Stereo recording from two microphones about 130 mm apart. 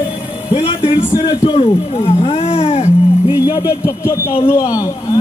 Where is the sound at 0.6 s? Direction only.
50° left (ahead or behind).